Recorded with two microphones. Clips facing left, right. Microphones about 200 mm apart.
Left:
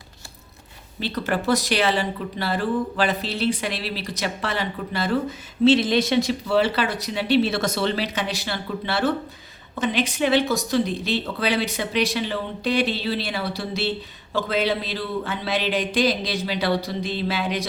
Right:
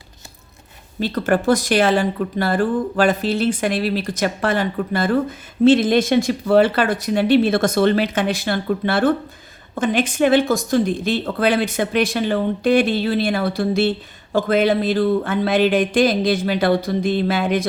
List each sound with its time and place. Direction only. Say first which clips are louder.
0.9 s speech: right 6 dB; 50° right (ahead or behind)